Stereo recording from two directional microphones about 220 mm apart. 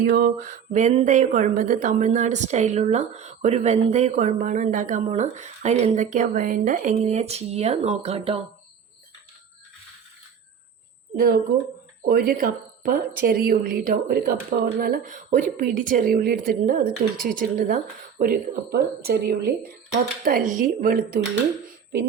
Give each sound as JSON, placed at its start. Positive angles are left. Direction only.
{"t": 0.0, "sound": "speech", "side_deg": -40}
{"t": 11.1, "sound": "a woman's voice", "side_deg": -45}